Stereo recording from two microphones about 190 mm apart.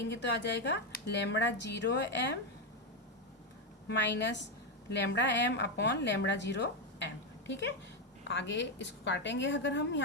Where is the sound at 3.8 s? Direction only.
65° left (ahead or behind).